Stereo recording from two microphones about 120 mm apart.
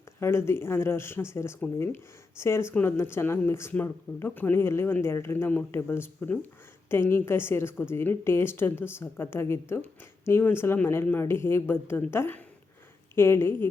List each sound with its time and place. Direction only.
0.2 s speech: 20° left (ahead or behind)